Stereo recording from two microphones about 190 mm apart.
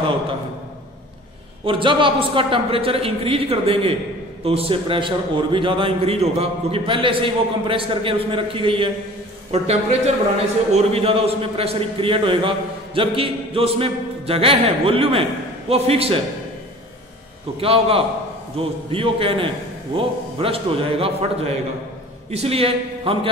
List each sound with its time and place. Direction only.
1.7 s a man's voice: 25° right (ahead or behind)
17.6 s a man's voice: 30° right (ahead or behind)